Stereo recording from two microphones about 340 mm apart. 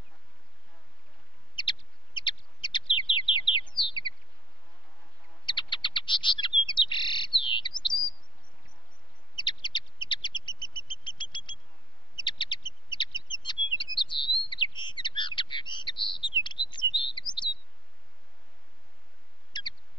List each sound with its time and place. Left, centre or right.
1.5 s bird: centre
5.4 s bird: centre
9.3 s bird: centre
16.1 s chirp: centre
19.5 s a sound: centre